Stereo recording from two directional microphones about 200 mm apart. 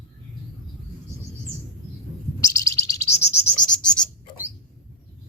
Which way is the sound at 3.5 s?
5° left (ahead or behind).